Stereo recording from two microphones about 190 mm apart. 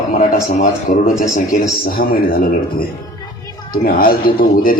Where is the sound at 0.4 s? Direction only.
45° left (ahead or behind).